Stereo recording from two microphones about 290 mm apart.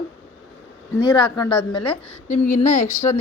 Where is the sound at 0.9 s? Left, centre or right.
Centre.